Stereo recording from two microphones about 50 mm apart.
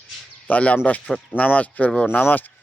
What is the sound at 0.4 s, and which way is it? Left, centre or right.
Speech, left.